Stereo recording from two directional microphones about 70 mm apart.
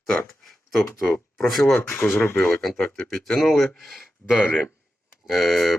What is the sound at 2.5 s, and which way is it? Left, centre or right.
Speech, centre.